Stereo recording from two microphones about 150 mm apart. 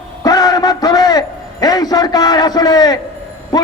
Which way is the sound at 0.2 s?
25° left (ahead or behind).